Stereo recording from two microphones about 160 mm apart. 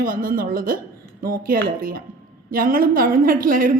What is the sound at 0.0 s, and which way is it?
A woman's voice, 60° right (ahead or behind).